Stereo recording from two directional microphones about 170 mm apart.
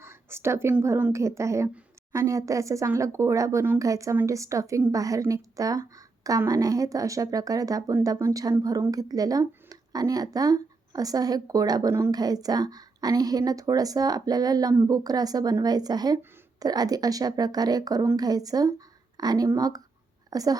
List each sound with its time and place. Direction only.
0.0 s speech: 15° right (ahead or behind)